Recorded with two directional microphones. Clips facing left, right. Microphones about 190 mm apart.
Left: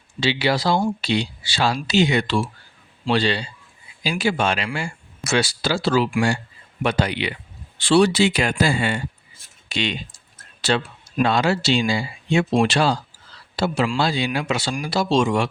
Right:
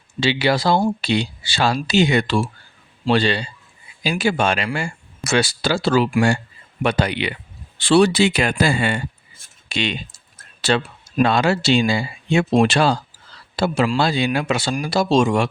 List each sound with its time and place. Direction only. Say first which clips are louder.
0.2 s speech: right 2 dB; 55° right (ahead or behind)
6.8 s speech: right 2 dB; 60° right (ahead or behind)